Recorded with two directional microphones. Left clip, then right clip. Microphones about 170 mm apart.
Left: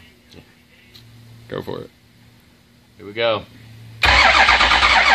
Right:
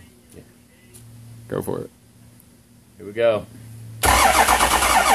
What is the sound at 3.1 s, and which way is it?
Speech, 45° left (ahead or behind).